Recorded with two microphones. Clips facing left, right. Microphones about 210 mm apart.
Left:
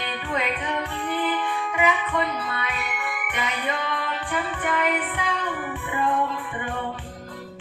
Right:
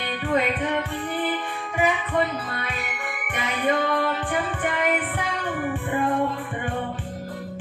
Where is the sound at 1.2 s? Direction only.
35° right (ahead or behind).